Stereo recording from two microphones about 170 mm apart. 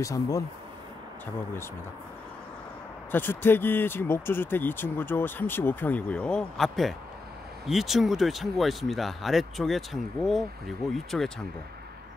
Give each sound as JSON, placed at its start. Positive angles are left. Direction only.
{"t": 0.0, "sound": "speech", "side_deg": 20}
{"t": 3.1, "sound": "speech", "side_deg": 10}